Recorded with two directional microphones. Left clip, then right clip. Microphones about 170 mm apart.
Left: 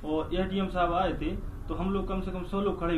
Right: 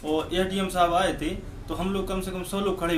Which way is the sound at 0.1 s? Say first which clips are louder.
Right 4 dB; 45° right (ahead or behind).